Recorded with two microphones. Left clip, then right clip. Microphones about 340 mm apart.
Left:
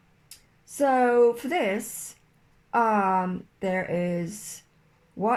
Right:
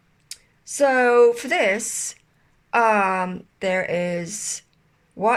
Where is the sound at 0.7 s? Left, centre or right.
Right.